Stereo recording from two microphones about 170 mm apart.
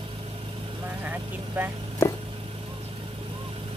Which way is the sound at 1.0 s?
10° right (ahead or behind).